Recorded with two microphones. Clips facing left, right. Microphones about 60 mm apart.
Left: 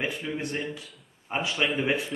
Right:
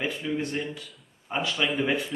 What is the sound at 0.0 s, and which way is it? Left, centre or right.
Speech, centre.